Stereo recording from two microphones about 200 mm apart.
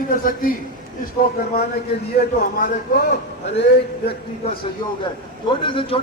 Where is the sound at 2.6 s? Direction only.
45° left (ahead or behind).